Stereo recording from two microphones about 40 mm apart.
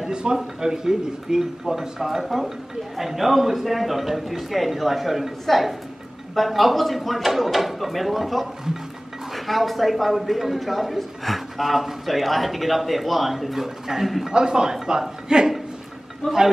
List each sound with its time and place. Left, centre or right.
0.0 s a man's voice: centre
14.3 s a man's voice: centre